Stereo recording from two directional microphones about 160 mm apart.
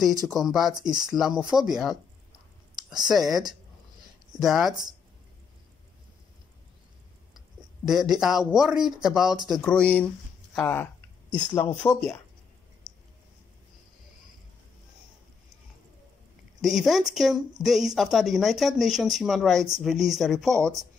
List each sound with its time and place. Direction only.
0.3 s speech: centre (ahead or behind)
3.1 s speech: centre (ahead or behind)
7.3 s a sound: 5° right (ahead or behind)
8.2 s speech: centre (ahead or behind)
9.6 s speech: 10° left (ahead or behind)
12.9 s a sound: 25° left (ahead or behind)
16.6 s speech: centre (ahead or behind)